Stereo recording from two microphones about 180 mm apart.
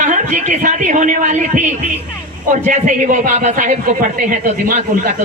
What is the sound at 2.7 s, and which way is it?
A man's voice, 45° right (ahead or behind).